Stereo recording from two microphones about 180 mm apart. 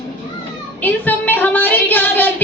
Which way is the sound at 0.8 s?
10° left (ahead or behind).